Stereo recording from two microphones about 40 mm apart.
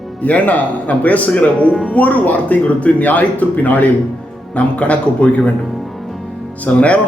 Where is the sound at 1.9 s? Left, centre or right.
Left.